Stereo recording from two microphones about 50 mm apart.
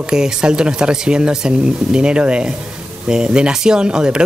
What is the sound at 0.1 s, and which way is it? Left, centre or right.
Speech, centre.